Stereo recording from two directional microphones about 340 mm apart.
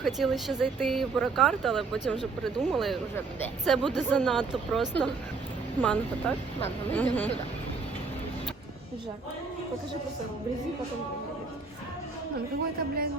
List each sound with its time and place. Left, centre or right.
0.0 s speech: centre